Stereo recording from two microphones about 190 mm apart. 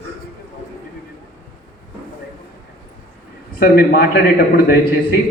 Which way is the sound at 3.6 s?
50° left (ahead or behind).